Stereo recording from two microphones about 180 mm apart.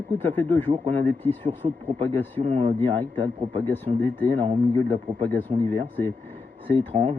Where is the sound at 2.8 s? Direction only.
10° left (ahead or behind).